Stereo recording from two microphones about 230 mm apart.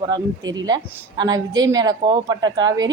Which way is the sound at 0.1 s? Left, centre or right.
Centre.